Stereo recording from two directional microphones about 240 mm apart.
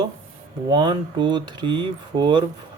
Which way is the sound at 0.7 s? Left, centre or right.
Centre.